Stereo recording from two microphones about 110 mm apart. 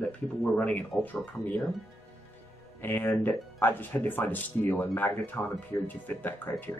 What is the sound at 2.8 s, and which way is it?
Speech, 20° left (ahead or behind).